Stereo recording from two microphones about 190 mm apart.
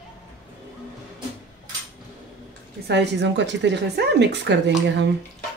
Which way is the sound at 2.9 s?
65° right (ahead or behind).